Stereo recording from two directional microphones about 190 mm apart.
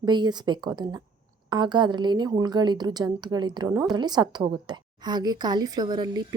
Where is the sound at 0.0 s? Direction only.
20° right (ahead or behind).